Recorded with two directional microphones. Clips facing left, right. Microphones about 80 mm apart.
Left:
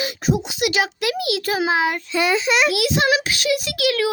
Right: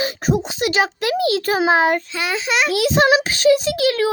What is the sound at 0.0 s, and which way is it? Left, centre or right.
A child's voice, right.